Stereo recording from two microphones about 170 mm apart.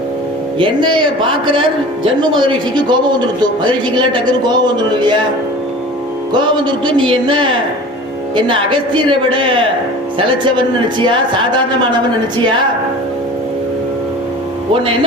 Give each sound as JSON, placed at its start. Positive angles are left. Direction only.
{"t": 0.6, "sound": "a man's voice", "side_deg": -30}
{"t": 2.3, "sound": "a man's voice", "side_deg": -25}
{"t": 6.8, "sound": "a man's voice", "side_deg": -30}